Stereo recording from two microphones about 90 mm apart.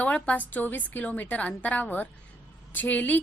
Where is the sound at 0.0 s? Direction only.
15° left (ahead or behind).